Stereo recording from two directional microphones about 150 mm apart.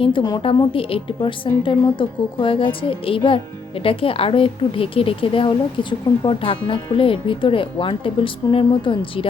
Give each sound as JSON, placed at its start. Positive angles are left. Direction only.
{"t": 0.0, "sound": "speech", "side_deg": 30}